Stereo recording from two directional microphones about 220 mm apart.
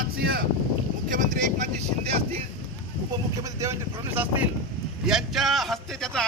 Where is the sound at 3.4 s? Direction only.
15° right (ahead or behind).